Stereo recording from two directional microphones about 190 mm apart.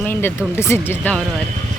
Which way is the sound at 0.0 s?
10° left (ahead or behind).